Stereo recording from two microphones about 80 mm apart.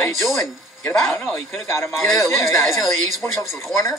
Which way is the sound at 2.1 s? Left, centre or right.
Left.